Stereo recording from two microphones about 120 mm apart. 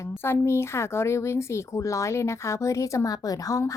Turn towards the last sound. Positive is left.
turn(degrees=30)  # may be behind; listen again after turning